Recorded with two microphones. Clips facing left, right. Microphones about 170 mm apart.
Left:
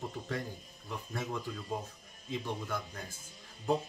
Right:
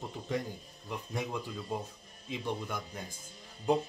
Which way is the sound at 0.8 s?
15° right (ahead or behind).